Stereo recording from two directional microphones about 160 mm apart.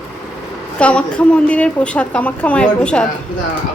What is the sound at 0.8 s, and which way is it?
Speech, 5° left (ahead or behind).